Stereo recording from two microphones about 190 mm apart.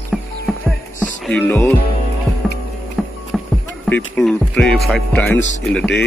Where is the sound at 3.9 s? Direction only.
5° left (ahead or behind).